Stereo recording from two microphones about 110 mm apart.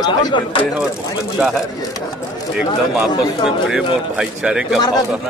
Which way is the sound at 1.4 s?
10° right (ahead or behind).